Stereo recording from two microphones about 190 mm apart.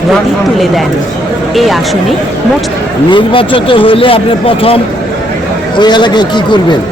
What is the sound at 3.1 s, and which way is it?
Speech, 25° left (ahead or behind).